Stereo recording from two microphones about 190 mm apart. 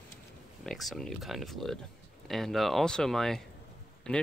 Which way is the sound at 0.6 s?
Centre (ahead or behind).